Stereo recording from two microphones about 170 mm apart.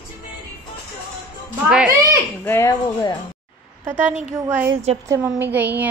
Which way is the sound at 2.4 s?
15° left (ahead or behind).